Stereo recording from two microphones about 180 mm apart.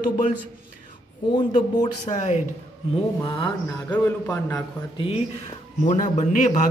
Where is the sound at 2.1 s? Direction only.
40° left (ahead or behind).